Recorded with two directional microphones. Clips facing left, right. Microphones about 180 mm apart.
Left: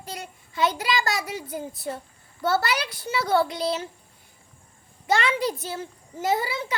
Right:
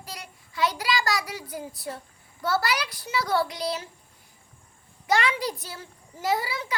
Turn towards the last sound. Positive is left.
turn(degrees=25)  # may be behind; listen again after turning